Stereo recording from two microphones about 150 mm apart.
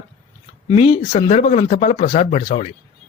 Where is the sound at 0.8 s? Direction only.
45° left (ahead or behind).